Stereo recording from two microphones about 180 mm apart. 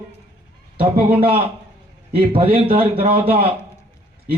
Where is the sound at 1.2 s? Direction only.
30° right (ahead or behind).